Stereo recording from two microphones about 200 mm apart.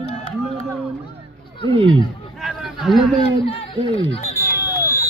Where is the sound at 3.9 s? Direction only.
30° left (ahead or behind).